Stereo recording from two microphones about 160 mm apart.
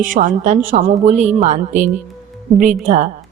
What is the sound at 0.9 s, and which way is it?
Speech, 50° right (ahead or behind).